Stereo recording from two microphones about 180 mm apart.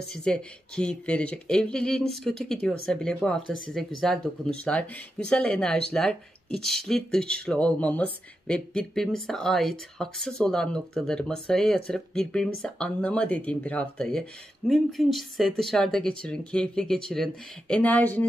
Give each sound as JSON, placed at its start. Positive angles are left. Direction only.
{"t": 0.1, "sound": "speech", "side_deg": 5}